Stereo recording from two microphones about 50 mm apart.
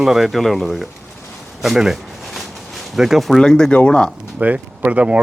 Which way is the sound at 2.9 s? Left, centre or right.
Centre.